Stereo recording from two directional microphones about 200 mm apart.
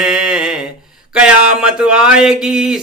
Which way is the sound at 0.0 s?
5° right (ahead or behind).